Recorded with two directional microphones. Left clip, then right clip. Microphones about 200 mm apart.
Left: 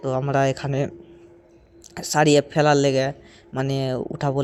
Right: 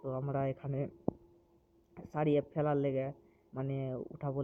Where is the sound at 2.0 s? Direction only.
30° left (ahead or behind).